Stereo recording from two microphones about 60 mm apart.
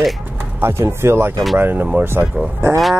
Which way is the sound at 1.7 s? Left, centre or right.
Right.